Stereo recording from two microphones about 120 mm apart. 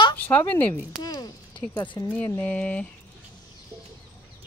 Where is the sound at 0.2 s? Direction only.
15° left (ahead or behind).